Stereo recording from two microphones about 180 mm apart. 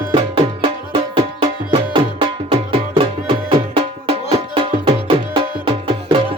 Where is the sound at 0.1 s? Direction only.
30° right (ahead or behind).